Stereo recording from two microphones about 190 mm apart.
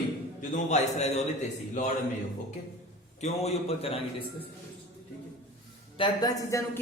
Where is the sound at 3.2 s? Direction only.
35° left (ahead or behind).